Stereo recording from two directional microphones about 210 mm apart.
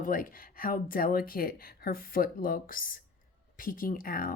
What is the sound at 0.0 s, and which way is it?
Speech, 40° left (ahead or behind).